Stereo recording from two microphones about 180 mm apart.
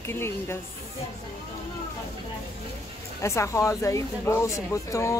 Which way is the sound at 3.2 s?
15° left (ahead or behind).